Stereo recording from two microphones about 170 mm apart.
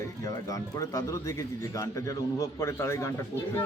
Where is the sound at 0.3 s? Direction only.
20° left (ahead or behind).